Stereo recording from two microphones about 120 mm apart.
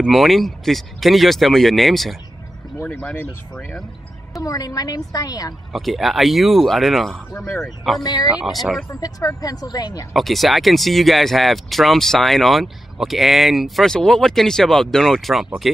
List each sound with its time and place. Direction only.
0.0 s speech: centre (ahead or behind)
2.8 s speech: 10° left (ahead or behind)
4.4 s a woman's voice: 30° left (ahead or behind)
5.7 s speech: centre (ahead or behind)
8.0 s a woman's voice: 35° left (ahead or behind)
8.4 s speech: centre (ahead or behind)
9.0 s a woman's voice: 30° left (ahead or behind)
10.1 s speech: centre (ahead or behind)